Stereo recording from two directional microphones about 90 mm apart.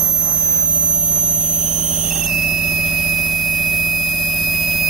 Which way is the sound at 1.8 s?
10° right (ahead or behind).